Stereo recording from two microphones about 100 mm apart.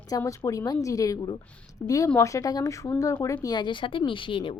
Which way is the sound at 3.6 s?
55° left (ahead or behind).